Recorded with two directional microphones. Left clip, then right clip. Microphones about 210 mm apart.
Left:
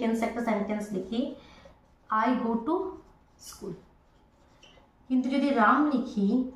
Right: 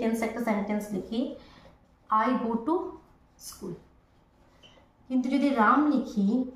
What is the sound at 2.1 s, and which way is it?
Speech, 20° right (ahead or behind).